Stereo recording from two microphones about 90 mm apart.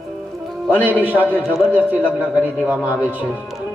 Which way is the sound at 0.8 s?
20° right (ahead or behind).